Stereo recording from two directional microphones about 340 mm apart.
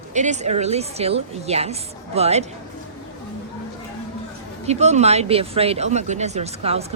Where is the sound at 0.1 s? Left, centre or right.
Right.